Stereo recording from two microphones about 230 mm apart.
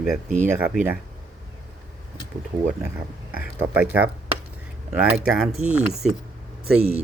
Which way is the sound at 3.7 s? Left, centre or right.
Centre.